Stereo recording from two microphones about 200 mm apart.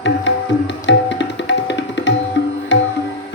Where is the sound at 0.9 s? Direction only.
60° left (ahead or behind).